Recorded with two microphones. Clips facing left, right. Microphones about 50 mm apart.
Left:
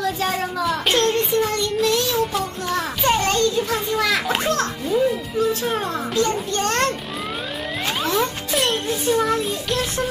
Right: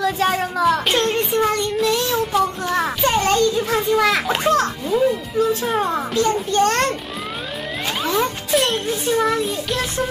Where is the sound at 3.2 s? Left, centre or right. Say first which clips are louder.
Right 2 dB; right.